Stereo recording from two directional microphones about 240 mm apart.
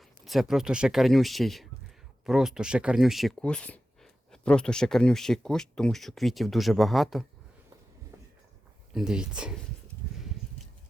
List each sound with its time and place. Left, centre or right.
0.3 s speech: centre
8.1 s a sound: centre
8.9 s speech: centre